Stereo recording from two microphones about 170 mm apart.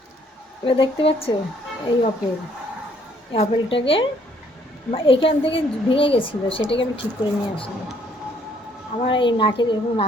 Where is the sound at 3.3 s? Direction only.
35° left (ahead or behind).